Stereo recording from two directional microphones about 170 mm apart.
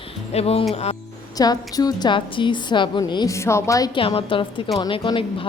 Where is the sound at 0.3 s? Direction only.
35° left (ahead or behind).